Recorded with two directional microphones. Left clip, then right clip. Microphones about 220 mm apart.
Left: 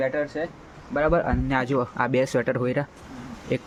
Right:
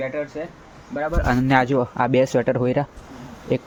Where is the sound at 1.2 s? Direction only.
20° right (ahead or behind).